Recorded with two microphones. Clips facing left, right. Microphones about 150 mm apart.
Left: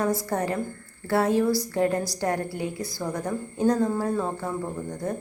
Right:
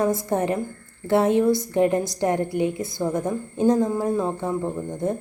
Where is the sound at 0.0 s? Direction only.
20° right (ahead or behind).